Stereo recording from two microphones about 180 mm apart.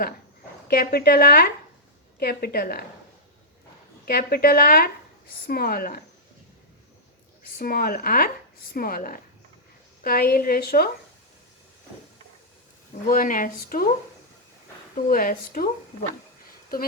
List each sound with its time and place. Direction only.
0.7 s a woman's voice: 60° left (ahead or behind)
4.0 s a woman's voice: 55° left (ahead or behind)
7.6 s a woman's voice: 55° left (ahead or behind)
13.1 s speech: 50° left (ahead or behind)
15.1 s speech: 50° left (ahead or behind)